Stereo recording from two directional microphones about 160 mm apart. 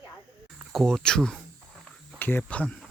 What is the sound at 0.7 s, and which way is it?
Speech, centre (ahead or behind).